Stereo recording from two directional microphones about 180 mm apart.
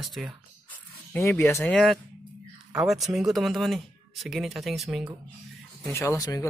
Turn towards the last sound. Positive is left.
turn(degrees=20)  # may be behind; listen again after turning